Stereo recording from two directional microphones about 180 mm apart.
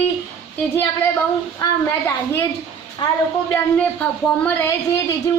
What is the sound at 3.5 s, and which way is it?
Speech, 10° left (ahead or behind).